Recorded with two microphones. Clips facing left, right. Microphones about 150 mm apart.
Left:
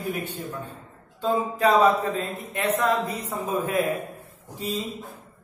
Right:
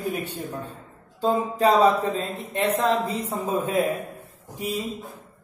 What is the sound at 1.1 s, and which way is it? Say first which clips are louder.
A woman's voice: right 2 dB; 35° right (ahead or behind).